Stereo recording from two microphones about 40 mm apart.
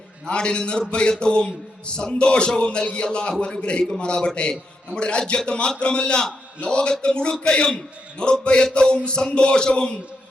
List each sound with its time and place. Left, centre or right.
0.3 s a man's voice: left